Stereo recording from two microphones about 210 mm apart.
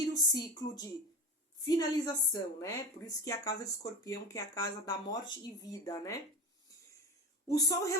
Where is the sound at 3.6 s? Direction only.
15° left (ahead or behind).